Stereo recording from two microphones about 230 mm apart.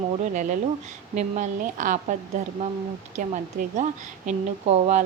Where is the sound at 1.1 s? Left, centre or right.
Right.